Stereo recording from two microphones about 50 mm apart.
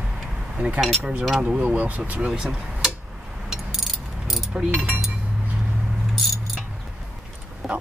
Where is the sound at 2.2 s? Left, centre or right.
Right.